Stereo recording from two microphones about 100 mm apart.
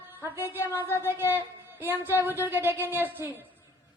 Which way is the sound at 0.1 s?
20° right (ahead or behind).